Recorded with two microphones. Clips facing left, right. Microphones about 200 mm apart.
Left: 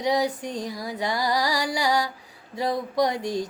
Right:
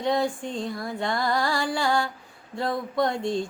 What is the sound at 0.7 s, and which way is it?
Music, 10° left (ahead or behind).